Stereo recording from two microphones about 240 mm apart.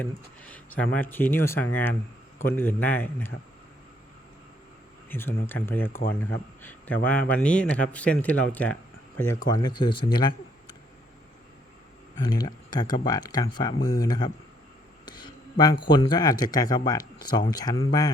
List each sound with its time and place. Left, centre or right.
0.0 s speech: centre
5.0 s speech: centre
12.2 s speech: centre
15.0 s a sound: centre
15.9 s speech: centre